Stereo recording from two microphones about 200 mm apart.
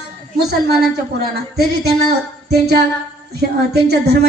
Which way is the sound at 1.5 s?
55° right (ahead or behind).